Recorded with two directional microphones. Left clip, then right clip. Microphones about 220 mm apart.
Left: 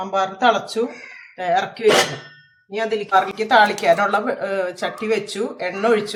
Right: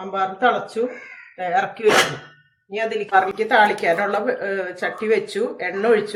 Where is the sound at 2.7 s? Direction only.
20° left (ahead or behind).